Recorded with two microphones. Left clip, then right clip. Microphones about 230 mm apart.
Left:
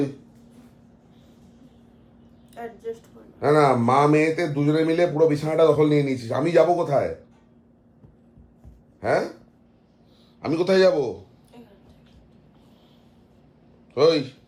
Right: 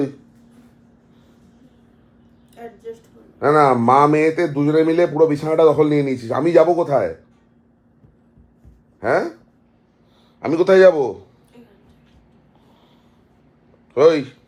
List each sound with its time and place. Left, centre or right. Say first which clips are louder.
0.0 s a sound: right 3 dB; centre
1.4 s vehicle: right 1 dB; centre
2.6 s speech: left 1 dB; centre
9.0 s speech: right 4 dB; centre
10.4 s a man's voice: right 7 dB; right
13.9 s a man's voice: right 5 dB; right